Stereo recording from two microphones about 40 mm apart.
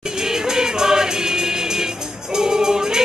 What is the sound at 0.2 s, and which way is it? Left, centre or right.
Music, centre.